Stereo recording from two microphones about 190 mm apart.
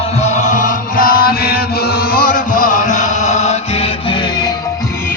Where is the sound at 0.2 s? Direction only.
40° left (ahead or behind).